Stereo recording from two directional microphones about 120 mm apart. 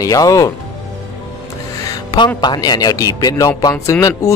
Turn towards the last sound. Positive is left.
turn(degrees=25)  # may be behind; listen again after turning